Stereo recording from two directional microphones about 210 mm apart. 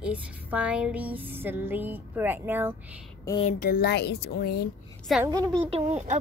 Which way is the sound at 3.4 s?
45° left (ahead or behind).